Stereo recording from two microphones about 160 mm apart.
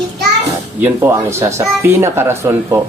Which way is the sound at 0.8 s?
15° right (ahead or behind).